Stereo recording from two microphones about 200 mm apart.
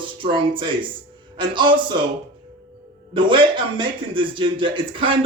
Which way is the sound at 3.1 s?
25° right (ahead or behind).